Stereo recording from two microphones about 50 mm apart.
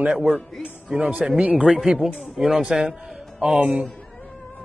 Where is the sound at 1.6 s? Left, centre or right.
Centre.